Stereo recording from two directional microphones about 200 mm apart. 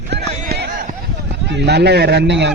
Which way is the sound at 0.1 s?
55° right (ahead or behind).